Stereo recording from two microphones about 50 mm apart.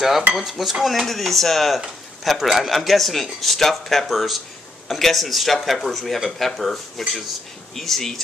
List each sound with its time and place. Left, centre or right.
0.3 s speech: centre